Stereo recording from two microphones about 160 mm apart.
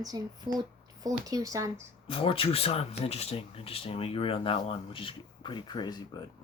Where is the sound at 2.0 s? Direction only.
35° left (ahead or behind).